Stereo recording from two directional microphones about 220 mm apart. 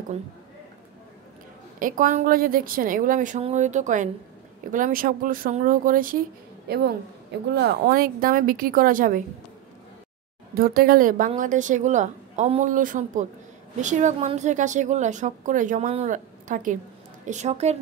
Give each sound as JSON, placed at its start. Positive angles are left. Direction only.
{"t": 1.8, "sound": "a woman's voice", "side_deg": -40}
{"t": 10.5, "sound": "a woman's voice", "side_deg": -45}